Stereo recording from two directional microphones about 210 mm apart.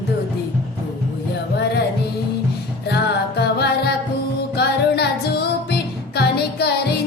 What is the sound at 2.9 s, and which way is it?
Music, 50° left (ahead or behind).